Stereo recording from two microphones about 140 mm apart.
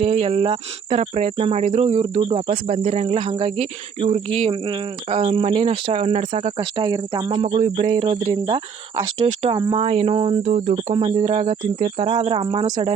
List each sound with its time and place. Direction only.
0.0 s cricket: 50° right (ahead or behind)
6.6 s speech: 35° right (ahead or behind)
9.8 s cricket: 45° right (ahead or behind)
10.4 s speech: 70° right (ahead or behind)
10.9 s cricket: 40° right (ahead or behind)